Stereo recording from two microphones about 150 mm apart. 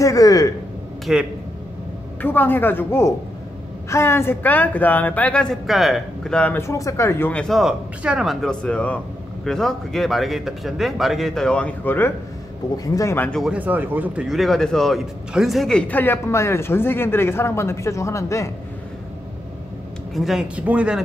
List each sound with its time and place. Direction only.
0.0 s a sound: 25° left (ahead or behind)
1.1 s speech: 5° right (ahead or behind)
2.2 s a woman's voice: 15° left (ahead or behind)
12.7 s speech: 25° left (ahead or behind)
13.3 s a woman's voice: 5° right (ahead or behind); by 18.5 s 20° left (ahead or behind)
20.2 s speech: 5° right (ahead or behind)